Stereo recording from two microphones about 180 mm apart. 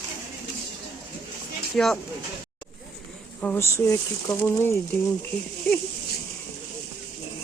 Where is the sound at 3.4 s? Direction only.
10° left (ahead or behind).